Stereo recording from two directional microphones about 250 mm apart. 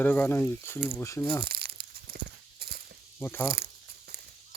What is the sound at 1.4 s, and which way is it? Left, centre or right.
Tearing, right.